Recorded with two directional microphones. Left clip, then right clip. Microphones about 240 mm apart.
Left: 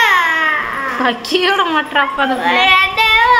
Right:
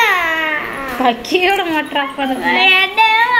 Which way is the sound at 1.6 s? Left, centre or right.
Centre.